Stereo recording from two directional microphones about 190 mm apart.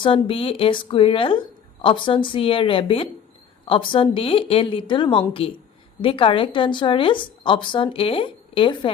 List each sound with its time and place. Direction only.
0.0 s a woman's voice: 30° left (ahead or behind)